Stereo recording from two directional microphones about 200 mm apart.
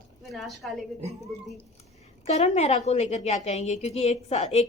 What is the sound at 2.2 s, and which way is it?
A woman's voice, 35° left (ahead or behind).